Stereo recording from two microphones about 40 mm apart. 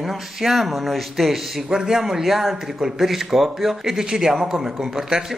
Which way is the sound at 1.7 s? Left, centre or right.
Centre.